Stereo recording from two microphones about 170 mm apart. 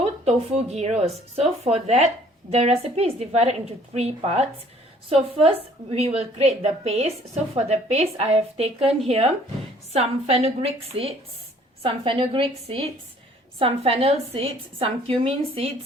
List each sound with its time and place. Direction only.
0.0 s speech: 40° right (ahead or behind)